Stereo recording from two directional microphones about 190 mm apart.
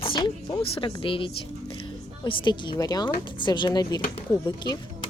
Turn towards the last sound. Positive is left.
turn(degrees=25)  # may be behind; listen again after turning